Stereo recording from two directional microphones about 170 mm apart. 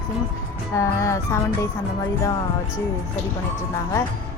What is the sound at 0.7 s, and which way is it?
Speech, 20° left (ahead or behind).